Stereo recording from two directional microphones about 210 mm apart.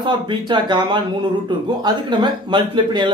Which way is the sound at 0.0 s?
20° right (ahead or behind).